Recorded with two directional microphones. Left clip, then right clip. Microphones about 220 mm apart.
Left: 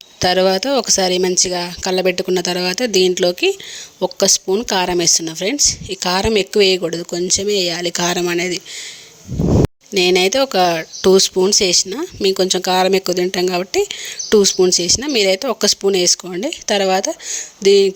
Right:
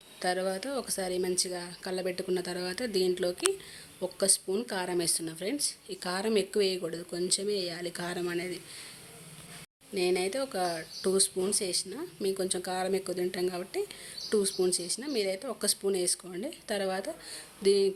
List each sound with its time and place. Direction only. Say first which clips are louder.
0.2 s speech: left 17 dB; 35° left (ahead or behind)
9.9 s speech: left 15 dB; 35° left (ahead or behind)